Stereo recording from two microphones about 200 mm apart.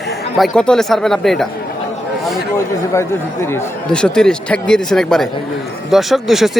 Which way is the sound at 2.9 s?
15° left (ahead or behind).